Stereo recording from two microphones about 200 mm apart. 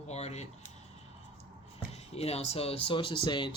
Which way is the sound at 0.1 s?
35° left (ahead or behind).